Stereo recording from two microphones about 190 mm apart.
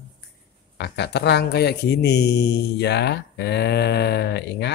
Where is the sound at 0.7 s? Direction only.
60° left (ahead or behind).